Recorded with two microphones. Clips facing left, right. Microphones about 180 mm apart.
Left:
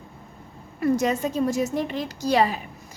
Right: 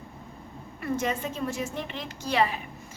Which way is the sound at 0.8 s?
40° left (ahead or behind).